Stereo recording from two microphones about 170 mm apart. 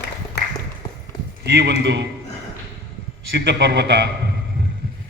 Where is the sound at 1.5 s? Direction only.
90° right.